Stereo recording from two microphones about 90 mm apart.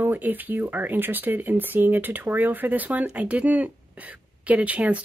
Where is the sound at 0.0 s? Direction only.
20° right (ahead or behind).